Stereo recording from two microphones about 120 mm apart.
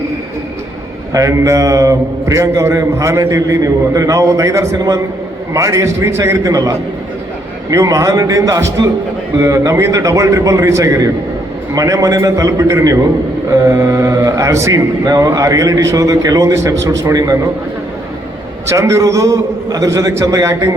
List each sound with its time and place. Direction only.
1.1 s a man's voice: 25° right (ahead or behind)
18.7 s a man's voice: 25° right (ahead or behind)